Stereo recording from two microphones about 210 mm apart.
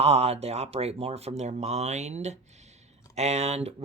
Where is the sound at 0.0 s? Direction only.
30° right (ahead or behind).